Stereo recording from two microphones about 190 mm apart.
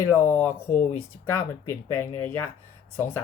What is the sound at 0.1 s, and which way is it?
Speech, 15° left (ahead or behind).